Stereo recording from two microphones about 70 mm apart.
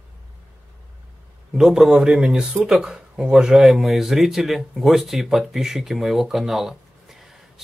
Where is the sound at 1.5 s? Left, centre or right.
Centre.